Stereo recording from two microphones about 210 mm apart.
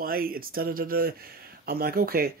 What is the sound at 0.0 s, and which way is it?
Speech, 45° right (ahead or behind).